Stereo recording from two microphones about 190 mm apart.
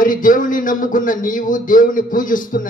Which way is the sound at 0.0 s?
45° left (ahead or behind).